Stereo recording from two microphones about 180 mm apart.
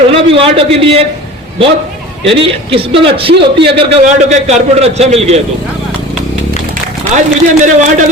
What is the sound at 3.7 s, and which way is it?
A man's voice, 40° right (ahead or behind).